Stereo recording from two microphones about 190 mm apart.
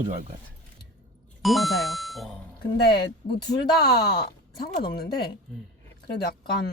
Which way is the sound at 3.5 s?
55° left (ahead or behind).